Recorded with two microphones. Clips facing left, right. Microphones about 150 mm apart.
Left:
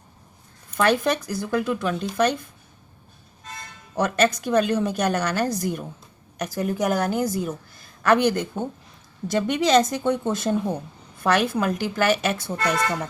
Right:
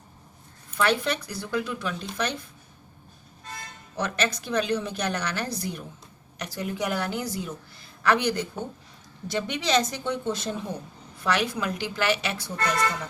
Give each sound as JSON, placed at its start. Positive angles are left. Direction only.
{"t": 0.8, "sound": "a woman's voice", "side_deg": 50}
{"t": 3.9, "sound": "a woman's voice", "side_deg": 50}